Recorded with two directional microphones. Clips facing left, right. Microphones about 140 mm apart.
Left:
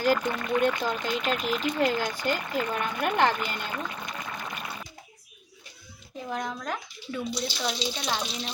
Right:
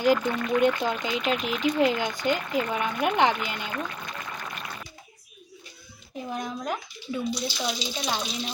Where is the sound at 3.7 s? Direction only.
15° left (ahead or behind).